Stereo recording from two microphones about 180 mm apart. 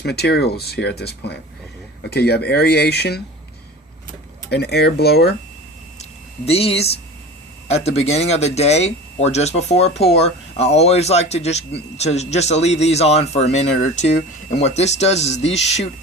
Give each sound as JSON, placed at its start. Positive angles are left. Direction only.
{"t": 0.0, "sound": "speech", "side_deg": 65}
{"t": 4.4, "sound": "speech", "side_deg": 65}
{"t": 6.0, "sound": "a sound", "side_deg": 35}
{"t": 7.7, "sound": "speech", "side_deg": 35}